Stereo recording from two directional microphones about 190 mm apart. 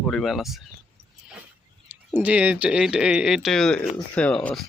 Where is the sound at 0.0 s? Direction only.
Centre (ahead or behind).